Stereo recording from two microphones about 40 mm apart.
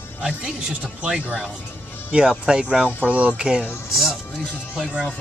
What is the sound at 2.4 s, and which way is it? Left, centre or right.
Speech, right.